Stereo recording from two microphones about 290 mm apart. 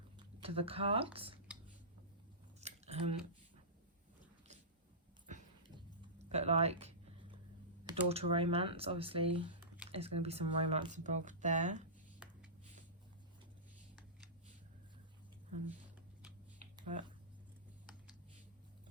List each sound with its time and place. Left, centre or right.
0.3 s speech: centre
2.6 s scissors: right
5.3 s dog: right
6.3 s a sound: right
7.9 s speech: centre
9.6 s squish: centre
9.9 s speech: right
16.6 s a sound: right